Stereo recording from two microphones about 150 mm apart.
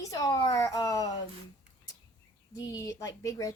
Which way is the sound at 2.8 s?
20° left (ahead or behind).